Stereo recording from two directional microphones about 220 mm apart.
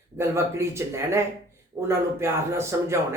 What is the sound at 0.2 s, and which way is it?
Speech, 15° right (ahead or behind).